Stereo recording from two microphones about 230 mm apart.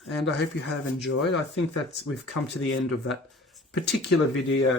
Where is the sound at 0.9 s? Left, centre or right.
Left.